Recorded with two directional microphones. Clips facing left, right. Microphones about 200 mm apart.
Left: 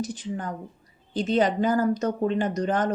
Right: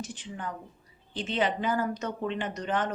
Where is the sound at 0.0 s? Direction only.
40° left (ahead or behind).